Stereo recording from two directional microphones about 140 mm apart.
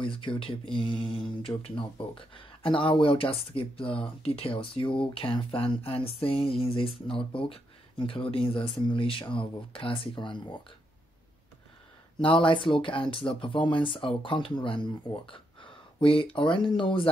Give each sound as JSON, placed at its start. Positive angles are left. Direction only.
{"t": 0.0, "sound": "speech", "side_deg": 35}
{"t": 12.2, "sound": "speech", "side_deg": 35}